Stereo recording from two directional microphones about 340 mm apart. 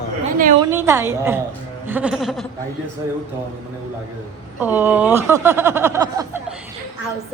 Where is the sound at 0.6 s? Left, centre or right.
Centre.